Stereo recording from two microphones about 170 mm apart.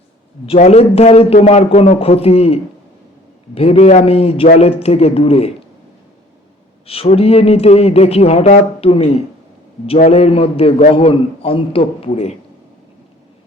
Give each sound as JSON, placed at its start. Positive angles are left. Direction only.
{"t": 0.4, "sound": "speech", "side_deg": 40}
{"t": 6.8, "sound": "speech", "side_deg": 35}